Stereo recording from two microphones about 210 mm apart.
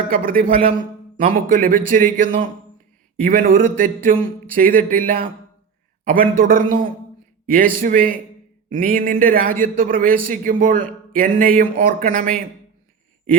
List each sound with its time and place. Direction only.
0.1 s speech: 40° right (ahead or behind)